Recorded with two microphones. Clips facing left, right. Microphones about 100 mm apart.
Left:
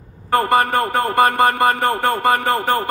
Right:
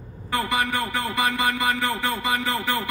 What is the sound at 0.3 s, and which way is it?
A man's voice, 50° left (ahead or behind).